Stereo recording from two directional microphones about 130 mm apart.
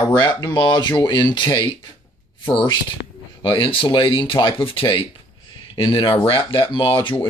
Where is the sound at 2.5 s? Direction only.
40° left (ahead or behind).